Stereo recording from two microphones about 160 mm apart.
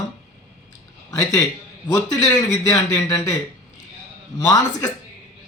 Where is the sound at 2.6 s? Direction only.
20° left (ahead or behind).